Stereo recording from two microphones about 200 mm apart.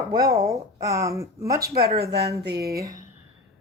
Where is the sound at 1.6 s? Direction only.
50° right (ahead or behind).